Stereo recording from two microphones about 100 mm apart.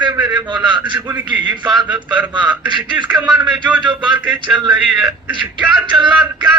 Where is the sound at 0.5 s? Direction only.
50° right (ahead or behind).